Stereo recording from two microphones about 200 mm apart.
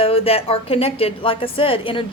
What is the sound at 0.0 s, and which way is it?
A woman's voice, 30° left (ahead or behind).